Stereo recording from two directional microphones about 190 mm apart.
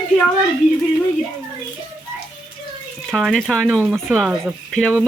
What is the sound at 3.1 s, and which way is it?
Speech, centre (ahead or behind).